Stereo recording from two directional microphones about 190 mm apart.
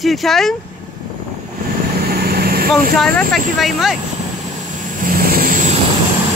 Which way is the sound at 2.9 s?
Centre (ahead or behind).